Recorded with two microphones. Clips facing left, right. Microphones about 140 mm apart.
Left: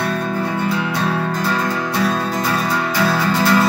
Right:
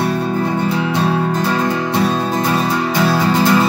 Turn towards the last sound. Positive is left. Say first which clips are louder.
# right 3 dB
turn(degrees=-20)  # may be behind; listen again after turning